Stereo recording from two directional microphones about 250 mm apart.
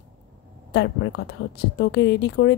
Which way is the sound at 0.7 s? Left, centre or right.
Left.